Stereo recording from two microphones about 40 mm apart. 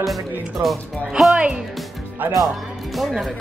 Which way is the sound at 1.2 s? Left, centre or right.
Centre.